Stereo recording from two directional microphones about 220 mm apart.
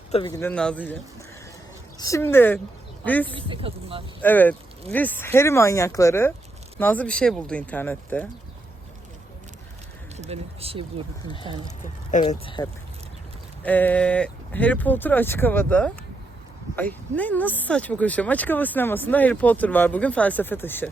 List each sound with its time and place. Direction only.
0.1 s speech: 20° left (ahead or behind)
2.0 s speech: 15° left (ahead or behind)
3.2 s speech: 20° right (ahead or behind)
4.2 s speech: 10° left (ahead or behind)
10.2 s speech: 30° right (ahead or behind)
11.3 s speech: 20° left (ahead or behind)
13.6 s speech: 5° left (ahead or behind)
17.2 s speech: 10° left (ahead or behind)